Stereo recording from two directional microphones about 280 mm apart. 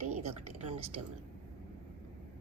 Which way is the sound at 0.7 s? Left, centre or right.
Right.